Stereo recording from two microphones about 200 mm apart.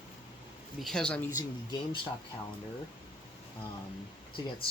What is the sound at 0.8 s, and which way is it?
Speech, centre (ahead or behind).